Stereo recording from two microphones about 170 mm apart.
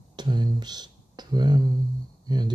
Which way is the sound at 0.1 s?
25° right (ahead or behind).